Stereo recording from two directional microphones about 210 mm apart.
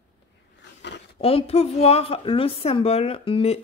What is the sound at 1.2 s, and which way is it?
A woman's voice, 30° left (ahead or behind).